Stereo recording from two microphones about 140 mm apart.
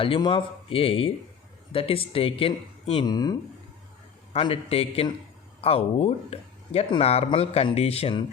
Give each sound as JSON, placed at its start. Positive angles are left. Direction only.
{"t": 0.0, "sound": "speech", "side_deg": 40}
{"t": 4.3, "sound": "speech", "side_deg": 45}